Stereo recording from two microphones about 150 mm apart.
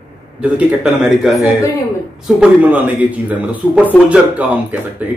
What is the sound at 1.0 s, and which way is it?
A man's voice, centre (ahead or behind).